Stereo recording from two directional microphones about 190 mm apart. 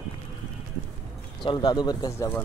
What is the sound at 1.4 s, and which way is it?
Speech, 25° left (ahead or behind).